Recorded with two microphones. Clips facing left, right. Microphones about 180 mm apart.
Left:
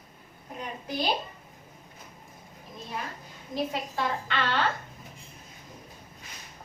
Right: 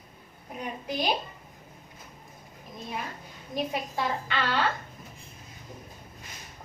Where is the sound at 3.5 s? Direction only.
15° right (ahead or behind).